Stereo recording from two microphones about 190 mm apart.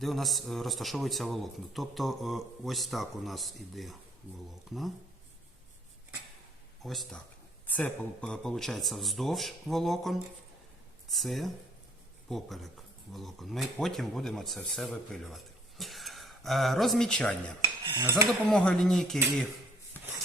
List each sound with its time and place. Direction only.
0.0 s a man's voice: centre (ahead or behind)
6.8 s a man's voice: centre (ahead or behind)
17.6 s cutlery: 25° right (ahead or behind)
18.4 s a man's voice: 5° left (ahead or behind)